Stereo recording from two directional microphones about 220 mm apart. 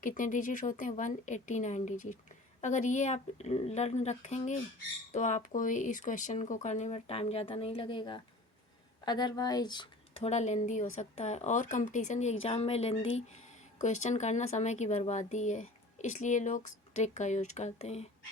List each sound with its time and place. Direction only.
0.0 s speech: 35° left (ahead or behind)